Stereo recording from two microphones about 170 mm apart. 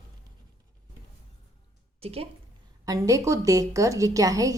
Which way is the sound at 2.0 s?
35° right (ahead or behind).